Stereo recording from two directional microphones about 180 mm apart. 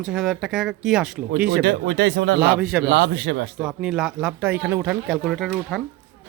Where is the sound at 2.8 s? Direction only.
75° right (ahead or behind).